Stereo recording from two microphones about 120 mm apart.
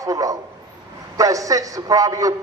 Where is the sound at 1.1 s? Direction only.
30° right (ahead or behind).